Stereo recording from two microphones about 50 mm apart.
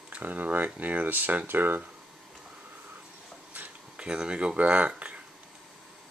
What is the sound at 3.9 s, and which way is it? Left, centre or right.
Speech, centre.